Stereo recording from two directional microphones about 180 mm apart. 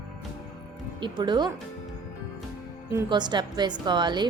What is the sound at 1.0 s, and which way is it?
Speech, 25° right (ahead or behind).